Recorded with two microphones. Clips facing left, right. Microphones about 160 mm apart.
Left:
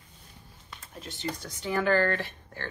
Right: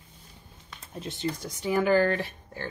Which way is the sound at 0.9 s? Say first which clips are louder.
Right 4 dB; 25° right (ahead or behind).